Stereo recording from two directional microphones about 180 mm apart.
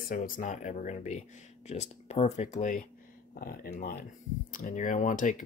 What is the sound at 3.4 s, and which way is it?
Speech, 55° left (ahead or behind).